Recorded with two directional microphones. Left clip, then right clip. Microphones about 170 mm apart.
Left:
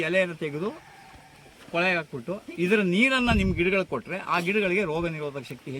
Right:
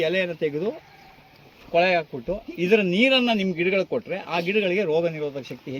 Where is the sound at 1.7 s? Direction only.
25° left (ahead or behind).